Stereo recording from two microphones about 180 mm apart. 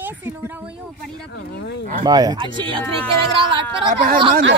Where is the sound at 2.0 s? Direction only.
20° right (ahead or behind).